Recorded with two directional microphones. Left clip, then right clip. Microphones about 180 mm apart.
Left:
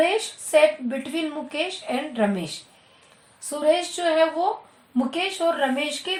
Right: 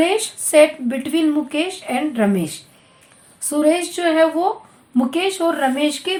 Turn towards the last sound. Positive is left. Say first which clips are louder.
# right 6 dB
turn(degrees=-35)  # may be behind; listen again after turning